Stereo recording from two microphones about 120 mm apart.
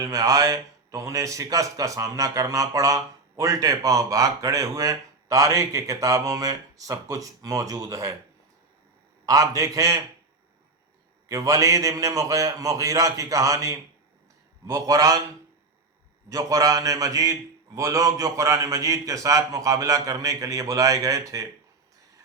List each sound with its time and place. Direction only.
0.0 s a man's voice: 30° right (ahead or behind)
9.2 s a man's voice: 30° right (ahead or behind)
11.3 s a man's voice: 30° right (ahead or behind)
16.3 s a man's voice: 30° right (ahead or behind)